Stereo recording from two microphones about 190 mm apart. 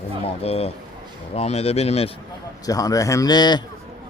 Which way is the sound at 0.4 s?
30° left (ahead or behind).